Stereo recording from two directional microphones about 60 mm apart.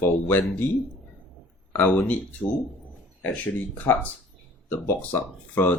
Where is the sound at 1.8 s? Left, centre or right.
Left.